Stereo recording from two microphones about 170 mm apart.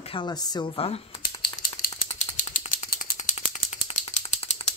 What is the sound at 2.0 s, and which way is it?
Mechanisms, 45° left (ahead or behind).